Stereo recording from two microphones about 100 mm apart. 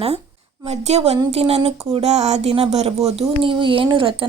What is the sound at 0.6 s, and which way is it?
Speech, 90° right.